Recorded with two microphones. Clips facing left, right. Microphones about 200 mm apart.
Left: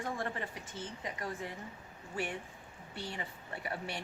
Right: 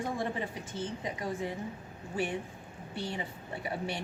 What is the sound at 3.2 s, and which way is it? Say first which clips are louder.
Speech: right 4 dB; 20° right (ahead or behind).